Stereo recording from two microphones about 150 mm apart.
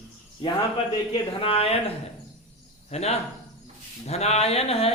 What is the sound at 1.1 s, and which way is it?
Speech, 35° left (ahead or behind).